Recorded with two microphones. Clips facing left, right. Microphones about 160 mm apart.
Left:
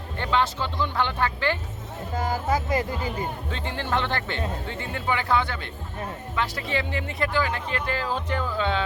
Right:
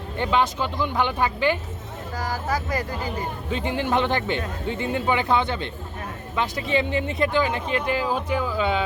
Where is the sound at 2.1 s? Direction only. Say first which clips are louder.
Left 2 dB; 25° left (ahead or behind).